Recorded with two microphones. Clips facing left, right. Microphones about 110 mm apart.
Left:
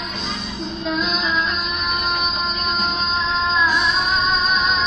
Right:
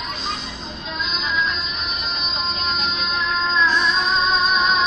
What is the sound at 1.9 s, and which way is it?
Music, 55° left (ahead or behind).